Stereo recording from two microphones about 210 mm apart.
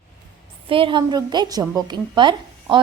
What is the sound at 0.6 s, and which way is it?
A woman's voice, 25° right (ahead or behind).